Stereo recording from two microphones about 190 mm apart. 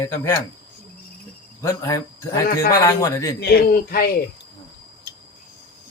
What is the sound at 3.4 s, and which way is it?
Speech, 55° left (ahead or behind).